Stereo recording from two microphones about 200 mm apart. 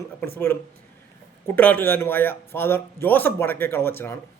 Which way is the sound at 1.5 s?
10° left (ahead or behind).